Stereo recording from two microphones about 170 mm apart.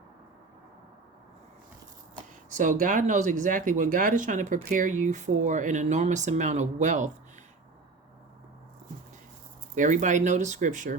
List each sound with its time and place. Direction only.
2.5 s speech: 50° right (ahead or behind)
9.7 s speech: 50° right (ahead or behind)